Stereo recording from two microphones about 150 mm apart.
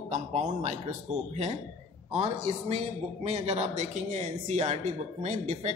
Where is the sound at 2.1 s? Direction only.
40° right (ahead or behind).